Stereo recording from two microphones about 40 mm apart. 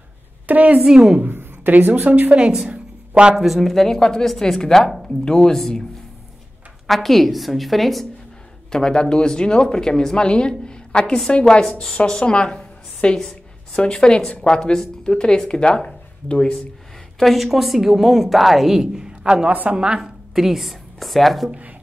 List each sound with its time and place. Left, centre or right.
0.5 s a woman's voice: right
0.8 s a woman's voice: centre
1.2 s a sound: right
1.7 s a woman's voice: right
2.2 s a woman's voice: right
2.7 s a sound: right
3.3 s speech: centre
3.7 s a woman's voice: centre
6.9 s speech: centre
8.7 s a woman's voice: centre
17.2 s speech: centre
18.9 s a woman's voice: centre
20.0 s a woman's voice: centre